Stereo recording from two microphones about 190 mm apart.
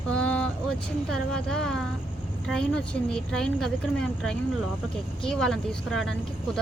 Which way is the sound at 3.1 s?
5° left (ahead or behind).